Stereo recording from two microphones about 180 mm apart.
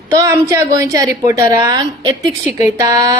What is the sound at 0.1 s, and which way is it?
A woman's voice, 20° right (ahead or behind).